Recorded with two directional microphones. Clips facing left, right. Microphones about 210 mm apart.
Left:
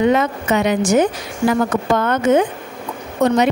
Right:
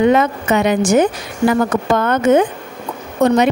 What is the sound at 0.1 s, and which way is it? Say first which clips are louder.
A woman's voice: right 2 dB; 55° right (ahead or behind).